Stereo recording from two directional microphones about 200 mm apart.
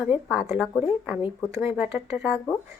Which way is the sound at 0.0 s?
5° right (ahead or behind).